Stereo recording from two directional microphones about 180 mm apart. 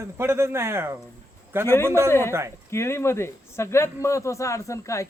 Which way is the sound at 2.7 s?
15° left (ahead or behind).